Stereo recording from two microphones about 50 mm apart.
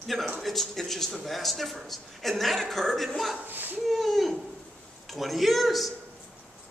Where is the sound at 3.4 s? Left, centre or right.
Right.